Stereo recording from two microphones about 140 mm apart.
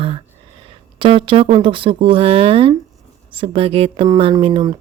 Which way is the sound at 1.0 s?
40° right (ahead or behind).